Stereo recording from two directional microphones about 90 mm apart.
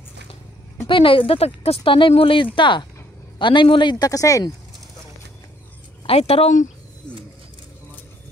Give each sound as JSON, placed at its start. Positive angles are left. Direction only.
{"t": 0.8, "sound": "speech", "side_deg": 70}
{"t": 2.5, "sound": "a man's voice", "side_deg": 60}
{"t": 4.0, "sound": "speech", "side_deg": 40}
{"t": 6.0, "sound": "speech", "side_deg": 90}